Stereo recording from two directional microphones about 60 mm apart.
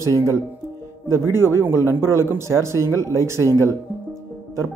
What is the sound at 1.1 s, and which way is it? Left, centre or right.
A man's voice, right.